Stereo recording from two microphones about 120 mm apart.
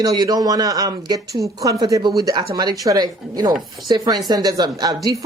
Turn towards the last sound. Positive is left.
turn(degrees=-30)  # may be behind; listen again after turning